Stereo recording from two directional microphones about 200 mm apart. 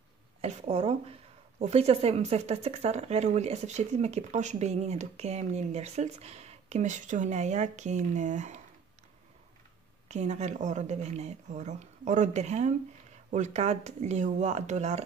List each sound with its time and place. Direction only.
0.4 s speech: 35° right (ahead or behind)
10.0 s speech: 35° right (ahead or behind)